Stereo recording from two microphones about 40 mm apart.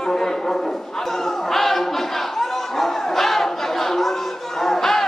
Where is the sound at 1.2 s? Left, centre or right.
Centre.